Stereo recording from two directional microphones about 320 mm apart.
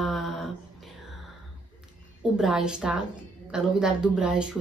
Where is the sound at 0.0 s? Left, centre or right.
Centre.